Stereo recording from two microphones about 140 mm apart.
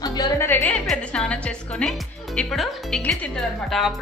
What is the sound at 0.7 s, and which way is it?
A woman's voice, 5° left (ahead or behind).